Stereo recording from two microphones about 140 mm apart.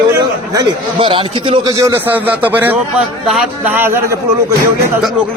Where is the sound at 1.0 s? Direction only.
40° right (ahead or behind).